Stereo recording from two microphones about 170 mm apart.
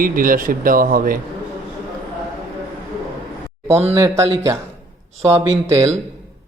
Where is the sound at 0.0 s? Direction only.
55° right (ahead or behind).